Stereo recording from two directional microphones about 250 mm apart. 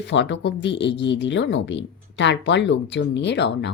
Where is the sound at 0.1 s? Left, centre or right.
Left.